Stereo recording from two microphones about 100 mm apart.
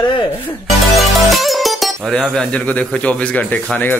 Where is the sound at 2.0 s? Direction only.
5° left (ahead or behind).